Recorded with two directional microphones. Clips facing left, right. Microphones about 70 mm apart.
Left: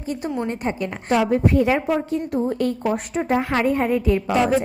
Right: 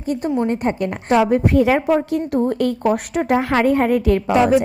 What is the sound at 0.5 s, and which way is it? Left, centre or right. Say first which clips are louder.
Speech: right 5 dB; right.